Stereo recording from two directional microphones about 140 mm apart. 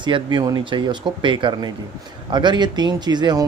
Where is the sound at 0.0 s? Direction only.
35° right (ahead or behind).